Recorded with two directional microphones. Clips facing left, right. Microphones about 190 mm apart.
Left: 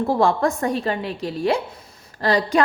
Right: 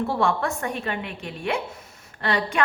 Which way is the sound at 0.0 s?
35° left (ahead or behind).